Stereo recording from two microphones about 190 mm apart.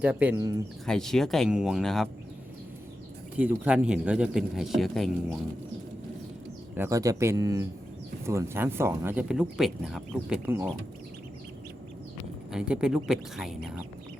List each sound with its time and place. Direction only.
0.0 s speech: 10° right (ahead or behind)
0.9 s speech: 5° left (ahead or behind)
3.3 s speech: 10° right (ahead or behind)
6.7 s speech: 15° right (ahead or behind)
12.5 s speech: 5° right (ahead or behind)